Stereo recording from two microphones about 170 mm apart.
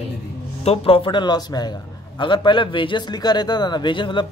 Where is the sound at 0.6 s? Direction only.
35° left (ahead or behind).